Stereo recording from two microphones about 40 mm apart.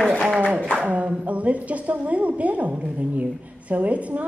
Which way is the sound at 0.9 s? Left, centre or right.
Right.